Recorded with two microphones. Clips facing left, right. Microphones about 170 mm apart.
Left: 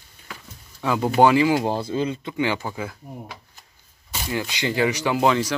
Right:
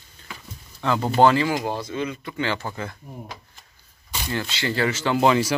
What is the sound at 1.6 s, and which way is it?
Speech, 30° left (ahead or behind).